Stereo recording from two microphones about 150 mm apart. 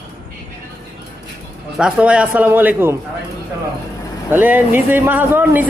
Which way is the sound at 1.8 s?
5° right (ahead or behind).